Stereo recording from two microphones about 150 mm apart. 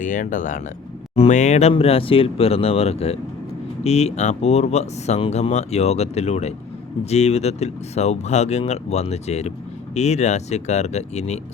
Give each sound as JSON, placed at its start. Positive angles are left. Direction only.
{"t": 0.0, "sound": "speech", "side_deg": 60}
{"t": 1.1, "sound": "speech", "side_deg": 45}